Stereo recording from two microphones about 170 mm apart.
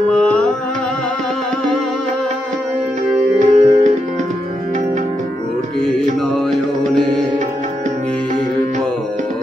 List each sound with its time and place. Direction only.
3.3 s music: 45° right (ahead or behind)